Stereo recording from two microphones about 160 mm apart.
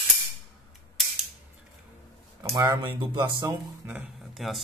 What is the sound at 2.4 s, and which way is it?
Speech, 20° right (ahead or behind).